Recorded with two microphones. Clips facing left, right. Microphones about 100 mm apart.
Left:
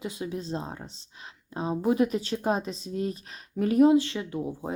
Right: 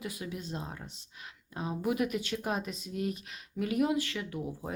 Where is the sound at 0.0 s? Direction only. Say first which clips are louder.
Left 6 dB; 25° left (ahead or behind).